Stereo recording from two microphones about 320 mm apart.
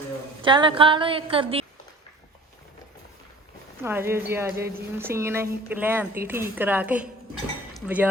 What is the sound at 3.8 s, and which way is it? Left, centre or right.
A woman's voice, centre.